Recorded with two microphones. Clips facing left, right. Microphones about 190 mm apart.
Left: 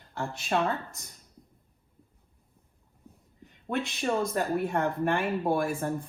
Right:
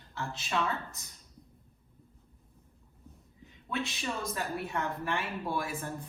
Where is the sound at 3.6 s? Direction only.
55° left (ahead or behind).